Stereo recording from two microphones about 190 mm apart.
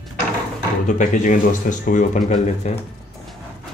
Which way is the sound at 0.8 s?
40° left (ahead or behind).